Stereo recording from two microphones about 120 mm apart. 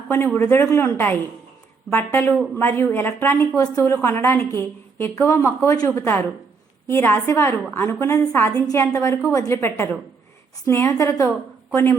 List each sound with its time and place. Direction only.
0.3 s a woman's voice: 20° left (ahead or behind)